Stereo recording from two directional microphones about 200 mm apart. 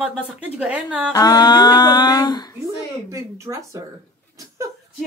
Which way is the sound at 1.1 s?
20° left (ahead or behind).